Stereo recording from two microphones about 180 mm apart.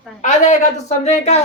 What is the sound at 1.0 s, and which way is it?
Speech, 35° left (ahead or behind).